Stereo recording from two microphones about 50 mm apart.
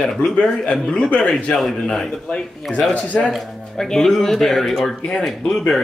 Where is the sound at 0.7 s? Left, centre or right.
Centre.